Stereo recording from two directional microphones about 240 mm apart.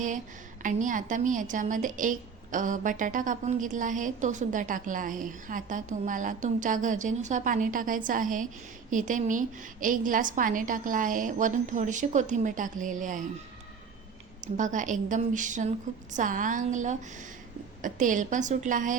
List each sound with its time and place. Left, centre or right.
0.6 s a woman's voice: right
14.4 s a woman's voice: right